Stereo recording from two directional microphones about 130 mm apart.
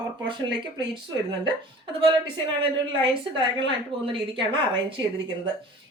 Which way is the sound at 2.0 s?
40° right (ahead or behind).